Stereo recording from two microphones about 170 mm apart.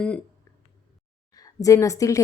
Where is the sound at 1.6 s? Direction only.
20° left (ahead or behind).